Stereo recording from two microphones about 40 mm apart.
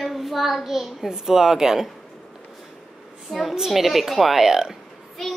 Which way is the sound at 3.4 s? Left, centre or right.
Centre.